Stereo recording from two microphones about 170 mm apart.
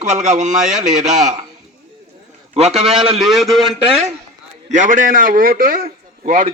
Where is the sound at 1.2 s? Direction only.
45° right (ahead or behind).